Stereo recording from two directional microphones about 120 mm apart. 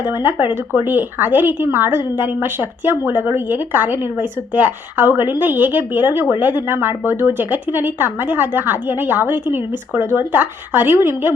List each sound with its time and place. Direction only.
0.0 s speech: 20° right (ahead or behind)